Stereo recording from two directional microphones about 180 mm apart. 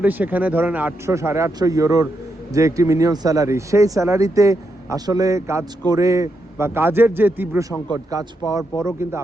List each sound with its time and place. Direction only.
0.0 s speech: 10° right (ahead or behind)